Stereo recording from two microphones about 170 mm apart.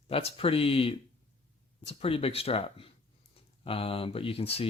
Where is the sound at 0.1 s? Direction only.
35° left (ahead or behind).